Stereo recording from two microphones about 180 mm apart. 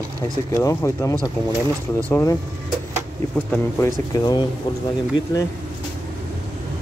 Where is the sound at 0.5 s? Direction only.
15° left (ahead or behind).